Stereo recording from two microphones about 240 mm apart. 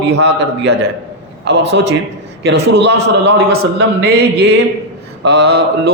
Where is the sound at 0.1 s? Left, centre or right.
Right.